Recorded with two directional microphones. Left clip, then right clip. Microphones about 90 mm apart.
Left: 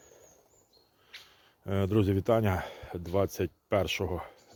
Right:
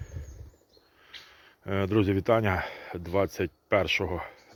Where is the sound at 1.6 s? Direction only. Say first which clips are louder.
Right 3 dB; 25° left (ahead or behind).